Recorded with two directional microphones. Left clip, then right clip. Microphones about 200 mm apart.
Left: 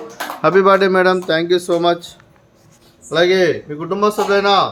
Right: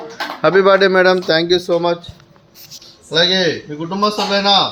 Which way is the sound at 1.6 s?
20° left (ahead or behind).